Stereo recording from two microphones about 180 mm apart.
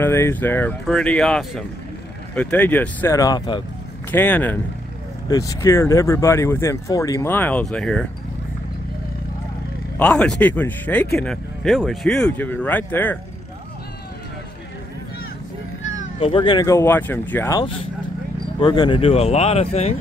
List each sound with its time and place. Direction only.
0.0 s speech: 15° left (ahead or behind)
4.1 s speech: 10° left (ahead or behind)
9.9 s speech: 5° left (ahead or behind)
16.2 s speech: 30° left (ahead or behind); by 17.6 s 10° left (ahead or behind)
18.6 s speech: 25° left (ahead or behind)